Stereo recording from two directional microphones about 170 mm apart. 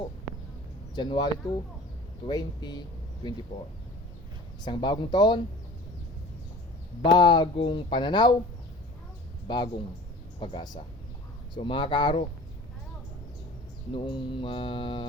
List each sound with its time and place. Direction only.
0.9 s speech: 25° left (ahead or behind)
4.6 s speech: 25° left (ahead or behind)
7.0 s speech: 25° left (ahead or behind)
9.5 s speech: 25° left (ahead or behind)
13.9 s speech: 30° left (ahead or behind)